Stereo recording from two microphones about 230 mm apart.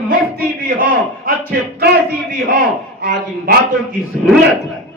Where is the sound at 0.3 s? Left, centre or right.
Right.